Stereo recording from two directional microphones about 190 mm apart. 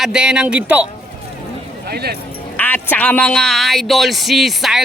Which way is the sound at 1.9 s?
55° right (ahead or behind).